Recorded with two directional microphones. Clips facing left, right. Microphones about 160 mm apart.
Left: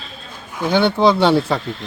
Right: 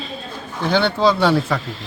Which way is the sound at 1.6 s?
Centre (ahead or behind).